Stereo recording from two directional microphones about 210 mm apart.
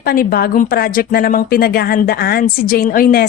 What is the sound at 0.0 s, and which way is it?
Speech, 45° left (ahead or behind).